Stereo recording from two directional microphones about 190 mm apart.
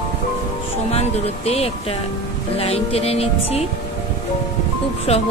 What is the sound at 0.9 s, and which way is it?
Speech, 30° left (ahead or behind).